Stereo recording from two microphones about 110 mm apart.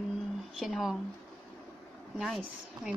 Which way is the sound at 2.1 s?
5° right (ahead or behind).